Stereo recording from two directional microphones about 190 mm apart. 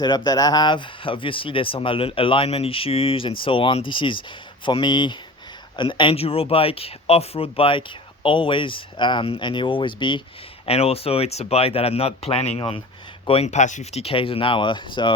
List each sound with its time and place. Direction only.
0.3 s speech: 20° left (ahead or behind)